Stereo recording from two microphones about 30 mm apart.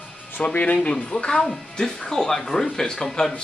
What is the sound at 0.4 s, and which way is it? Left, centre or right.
Speech, left.